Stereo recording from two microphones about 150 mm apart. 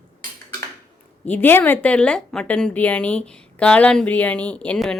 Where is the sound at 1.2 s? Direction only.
10° left (ahead or behind).